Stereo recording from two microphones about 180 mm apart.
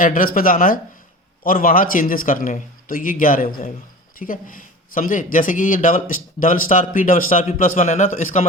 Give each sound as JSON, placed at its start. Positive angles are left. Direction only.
{"t": 0.0, "sound": "a man's voice", "side_deg": 50}